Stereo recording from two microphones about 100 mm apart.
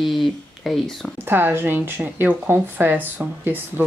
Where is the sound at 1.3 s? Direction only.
20° right (ahead or behind).